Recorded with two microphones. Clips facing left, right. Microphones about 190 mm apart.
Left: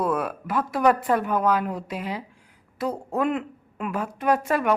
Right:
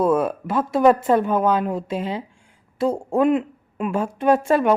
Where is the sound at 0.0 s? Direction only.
25° right (ahead or behind).